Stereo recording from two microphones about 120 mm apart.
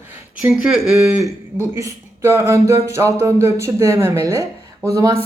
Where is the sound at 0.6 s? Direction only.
5° right (ahead or behind).